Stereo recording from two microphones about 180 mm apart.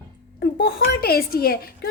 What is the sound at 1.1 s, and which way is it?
Speech, 55° left (ahead or behind).